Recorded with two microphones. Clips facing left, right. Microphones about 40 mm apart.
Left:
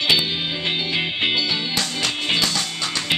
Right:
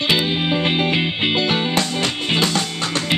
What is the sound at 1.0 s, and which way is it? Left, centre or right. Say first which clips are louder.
Music: right 2 dB; centre.